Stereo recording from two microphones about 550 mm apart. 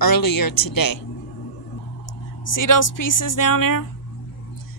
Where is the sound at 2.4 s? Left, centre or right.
Left.